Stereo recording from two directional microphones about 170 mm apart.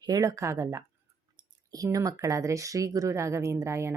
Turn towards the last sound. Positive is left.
turn(degrees=-15)  # may be behind; listen again after turning